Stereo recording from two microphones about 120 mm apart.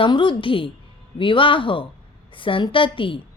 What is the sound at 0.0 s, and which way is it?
A woman's voice, 45° left (ahead or behind).